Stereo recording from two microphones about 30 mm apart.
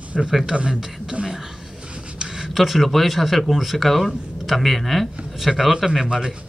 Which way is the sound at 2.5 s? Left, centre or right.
Centre.